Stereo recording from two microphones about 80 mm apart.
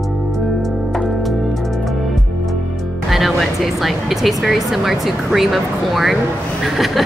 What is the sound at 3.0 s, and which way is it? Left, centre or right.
Speech, centre.